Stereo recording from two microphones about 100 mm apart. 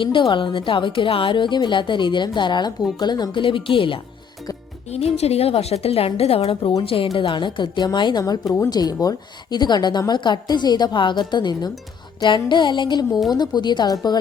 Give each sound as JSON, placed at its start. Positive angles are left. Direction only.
{"t": 0.0, "sound": "a woman's voice", "side_deg": 55}
{"t": 4.9, "sound": "a woman's voice", "side_deg": 90}
{"t": 8.2, "sound": "a woman's voice", "side_deg": 35}